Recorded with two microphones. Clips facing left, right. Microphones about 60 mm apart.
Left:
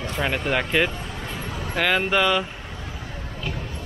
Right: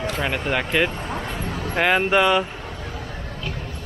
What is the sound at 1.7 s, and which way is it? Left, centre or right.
Speech, centre.